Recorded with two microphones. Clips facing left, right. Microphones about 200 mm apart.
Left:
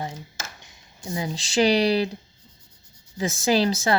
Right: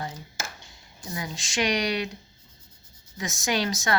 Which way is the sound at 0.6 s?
25° left (ahead or behind).